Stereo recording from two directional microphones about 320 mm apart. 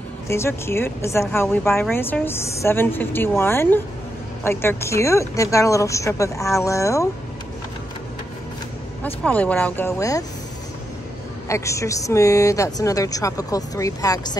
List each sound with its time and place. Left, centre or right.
0.3 s a woman's voice: centre
9.0 s speech: centre
11.4 s a woman's voice: centre